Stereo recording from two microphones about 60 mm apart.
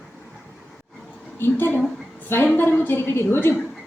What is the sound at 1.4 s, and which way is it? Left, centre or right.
A woman's voice, left.